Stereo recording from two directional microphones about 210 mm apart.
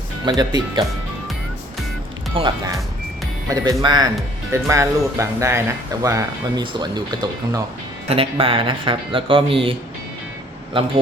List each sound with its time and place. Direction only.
0.3 s speech: 20° right (ahead or behind)
2.3 s speech: 25° right (ahead or behind)
3.5 s speech: 15° right (ahead or behind)